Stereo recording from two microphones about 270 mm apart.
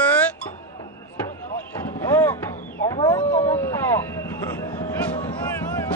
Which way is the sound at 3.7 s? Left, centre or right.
Centre.